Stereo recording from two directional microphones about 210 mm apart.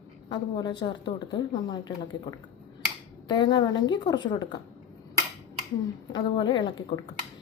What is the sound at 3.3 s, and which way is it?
Speech, 20° left (ahead or behind).